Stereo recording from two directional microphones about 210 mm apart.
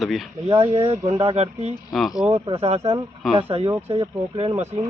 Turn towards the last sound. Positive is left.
turn(degrees=-30)  # may be behind; listen again after turning